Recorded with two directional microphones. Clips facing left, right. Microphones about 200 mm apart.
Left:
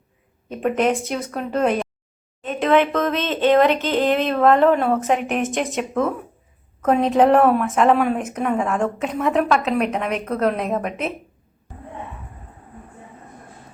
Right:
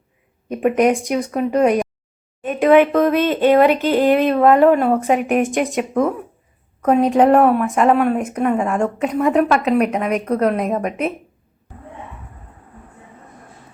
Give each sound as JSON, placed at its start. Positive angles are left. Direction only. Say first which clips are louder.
{"t": 0.4, "sound": "a woman's voice", "louder": "right 4 dB", "side_deg": -10}
{"t": 5.9, "sound": "a woman's voice", "louder": "right 3 dB", "side_deg": -15}